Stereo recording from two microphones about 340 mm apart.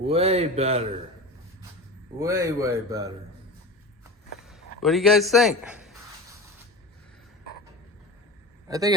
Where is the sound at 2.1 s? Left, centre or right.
Centre.